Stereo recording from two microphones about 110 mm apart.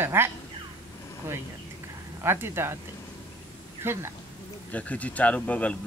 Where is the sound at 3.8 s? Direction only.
20° right (ahead or behind).